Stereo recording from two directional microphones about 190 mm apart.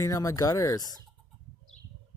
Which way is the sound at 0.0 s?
15° left (ahead or behind).